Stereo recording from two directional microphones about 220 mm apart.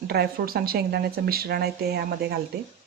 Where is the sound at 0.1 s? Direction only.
45° right (ahead or behind).